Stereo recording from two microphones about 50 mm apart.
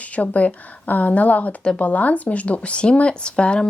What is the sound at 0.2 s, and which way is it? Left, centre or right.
A woman's voice, left.